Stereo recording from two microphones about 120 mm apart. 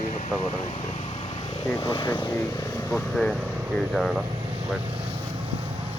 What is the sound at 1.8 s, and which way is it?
Speech, 35° left (ahead or behind).